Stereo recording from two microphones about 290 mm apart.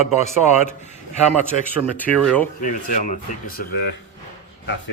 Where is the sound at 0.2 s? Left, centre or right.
Left.